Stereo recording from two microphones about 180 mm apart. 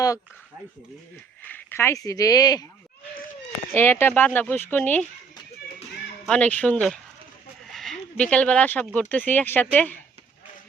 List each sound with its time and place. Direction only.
1.5 s speech: 15° left (ahead or behind)
3.8 s speech: 10° left (ahead or behind)
6.2 s speech: 5° left (ahead or behind)